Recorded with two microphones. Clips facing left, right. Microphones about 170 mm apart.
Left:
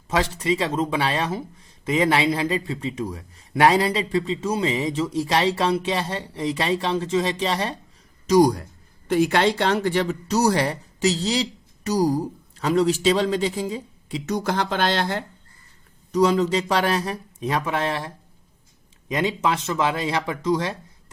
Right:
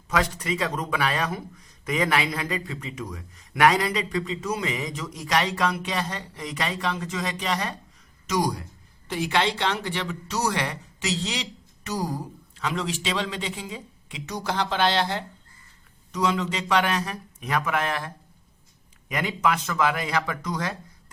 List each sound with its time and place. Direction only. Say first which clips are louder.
0.1 s speech: left 3 dB; 25° left (ahead or behind)
8.3 s speech: left 9 dB; 45° left (ahead or behind)
14.3 s speech: left 2 dB; 50° left (ahead or behind); by 20.7 s 25° left (ahead or behind)